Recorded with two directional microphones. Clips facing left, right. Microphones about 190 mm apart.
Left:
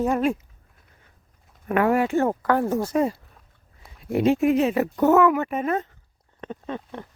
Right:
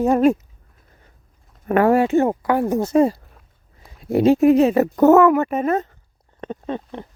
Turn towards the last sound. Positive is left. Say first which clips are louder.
# right 5 dB
turn(degrees=-25)  # may be behind; listen again after turning